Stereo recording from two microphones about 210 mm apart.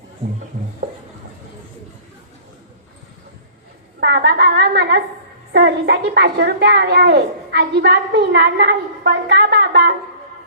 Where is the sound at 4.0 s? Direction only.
55° right (ahead or behind).